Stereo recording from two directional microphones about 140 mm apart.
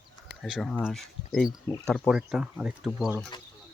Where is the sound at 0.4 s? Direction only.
Centre (ahead or behind).